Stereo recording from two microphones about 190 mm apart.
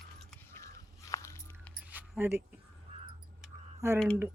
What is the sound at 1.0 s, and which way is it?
Walk, 15° left (ahead or behind).